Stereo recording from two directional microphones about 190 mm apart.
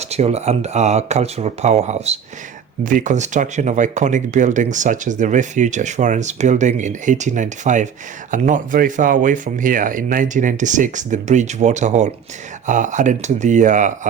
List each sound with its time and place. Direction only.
0.0 s speech: 35° right (ahead or behind)